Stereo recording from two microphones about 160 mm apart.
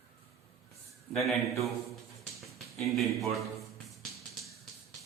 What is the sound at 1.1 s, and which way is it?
A man's voice, centre (ahead or behind).